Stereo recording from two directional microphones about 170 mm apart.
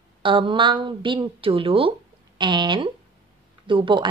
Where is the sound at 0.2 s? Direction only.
30° right (ahead or behind).